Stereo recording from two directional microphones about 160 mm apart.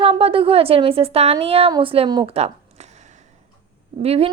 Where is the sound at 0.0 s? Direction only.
35° right (ahead or behind).